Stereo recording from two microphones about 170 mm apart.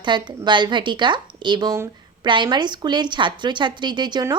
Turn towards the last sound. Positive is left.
turn(degrees=-25)  # may be behind; listen again after turning